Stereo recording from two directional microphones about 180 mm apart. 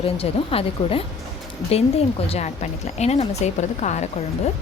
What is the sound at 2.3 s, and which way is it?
Speech, 35° left (ahead or behind).